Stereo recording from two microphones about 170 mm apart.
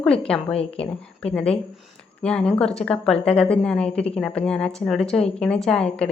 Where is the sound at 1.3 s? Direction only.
5° left (ahead or behind).